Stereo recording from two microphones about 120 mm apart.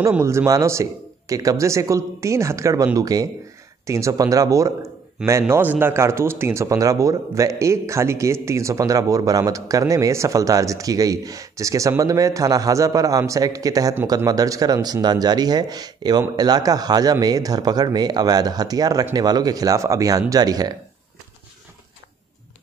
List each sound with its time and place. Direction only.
0.2 s a man's voice: 25° right (ahead or behind)